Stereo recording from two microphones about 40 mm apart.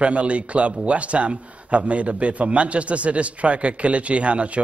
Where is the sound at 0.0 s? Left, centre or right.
Right.